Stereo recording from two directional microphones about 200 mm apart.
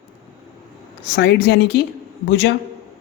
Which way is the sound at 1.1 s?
60° left (ahead or behind).